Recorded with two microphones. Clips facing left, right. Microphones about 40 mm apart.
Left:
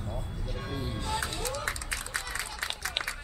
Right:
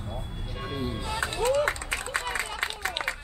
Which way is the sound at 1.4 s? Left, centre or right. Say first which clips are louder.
Right 9 dB; right.